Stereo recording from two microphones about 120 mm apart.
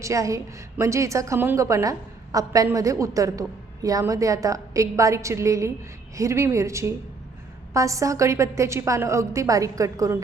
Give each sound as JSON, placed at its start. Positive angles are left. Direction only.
{"t": 0.0, "sound": "a woman's voice", "side_deg": -25}